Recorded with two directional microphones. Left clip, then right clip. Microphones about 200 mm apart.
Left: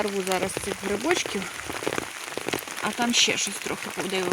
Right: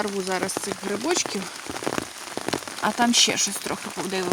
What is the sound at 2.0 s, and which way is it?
Rain on surface, 55° right (ahead or behind).